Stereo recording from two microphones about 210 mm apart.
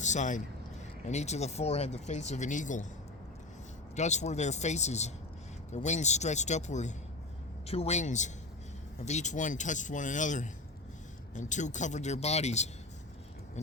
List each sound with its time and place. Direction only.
0.0 s a man's voice: 35° left (ahead or behind)
3.9 s speech: 35° left (ahead or behind)